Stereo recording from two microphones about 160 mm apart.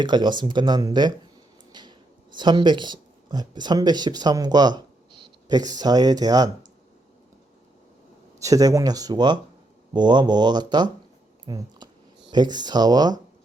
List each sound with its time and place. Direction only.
0.0 s speech: 30° right (ahead or behind)
8.4 s speech: 20° right (ahead or behind)
11.4 s a sound: 25° right (ahead or behind)
12.3 s speech: 25° right (ahead or behind)